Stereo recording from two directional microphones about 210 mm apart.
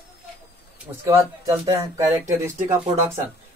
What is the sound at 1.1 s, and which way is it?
Speech, 15° right (ahead or behind).